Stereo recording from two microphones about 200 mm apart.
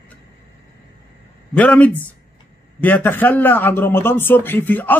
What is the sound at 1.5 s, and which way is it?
Speech, 5° left (ahead or behind).